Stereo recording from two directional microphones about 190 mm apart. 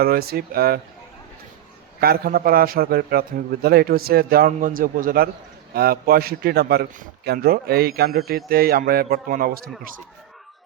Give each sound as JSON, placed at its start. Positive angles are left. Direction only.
{"t": 0.0, "sound": "a man's voice", "side_deg": -55}
{"t": 2.0, "sound": "a man's voice", "side_deg": -55}